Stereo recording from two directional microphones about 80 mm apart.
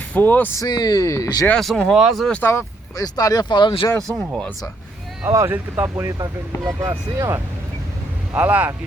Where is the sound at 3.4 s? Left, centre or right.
Left.